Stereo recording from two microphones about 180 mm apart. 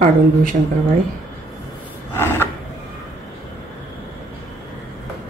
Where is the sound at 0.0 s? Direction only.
50° right (ahead or behind).